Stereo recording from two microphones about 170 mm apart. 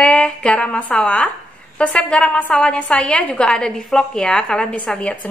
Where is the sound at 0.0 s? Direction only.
5° left (ahead or behind).